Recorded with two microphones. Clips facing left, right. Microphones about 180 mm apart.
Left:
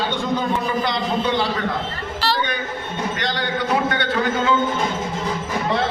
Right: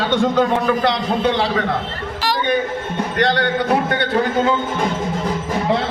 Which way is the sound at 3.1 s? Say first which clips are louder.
Right 8 dB; 60° right (ahead or behind).